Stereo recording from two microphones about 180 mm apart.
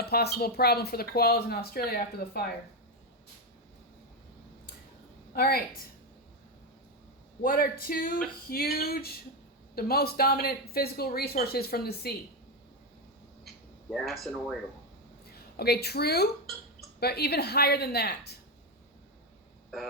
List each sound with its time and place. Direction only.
0.0 s speech: 60° left (ahead or behind)
5.3 s a woman's voice: 60° left (ahead or behind)
7.4 s speech: 55° left (ahead or behind)
13.9 s speech: centre (ahead or behind)
15.5 s speech: 60° left (ahead or behind)